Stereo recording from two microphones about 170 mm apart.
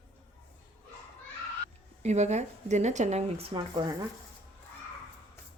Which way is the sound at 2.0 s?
40° right (ahead or behind).